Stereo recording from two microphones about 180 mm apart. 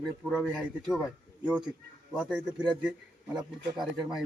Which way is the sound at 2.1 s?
5° right (ahead or behind).